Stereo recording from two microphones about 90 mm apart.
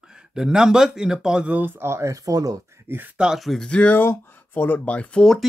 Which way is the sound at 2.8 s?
25° right (ahead or behind).